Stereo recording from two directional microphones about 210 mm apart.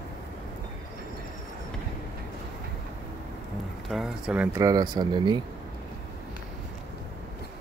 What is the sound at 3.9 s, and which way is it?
Speech, centre (ahead or behind).